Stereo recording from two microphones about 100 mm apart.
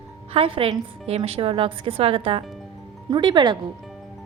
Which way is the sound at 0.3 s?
65° right (ahead or behind).